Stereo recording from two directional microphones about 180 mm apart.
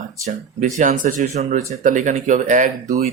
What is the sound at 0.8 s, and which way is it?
Speech, 45° right (ahead or behind).